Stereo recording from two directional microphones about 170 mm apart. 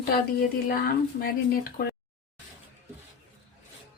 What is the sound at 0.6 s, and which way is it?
Speech, 55° left (ahead or behind).